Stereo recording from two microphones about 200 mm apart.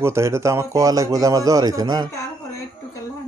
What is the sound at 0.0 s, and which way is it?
A man's voice, 15° right (ahead or behind).